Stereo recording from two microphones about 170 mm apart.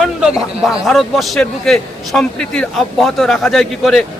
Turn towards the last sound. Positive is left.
turn(degrees=0)  # may be behind; listen again after turning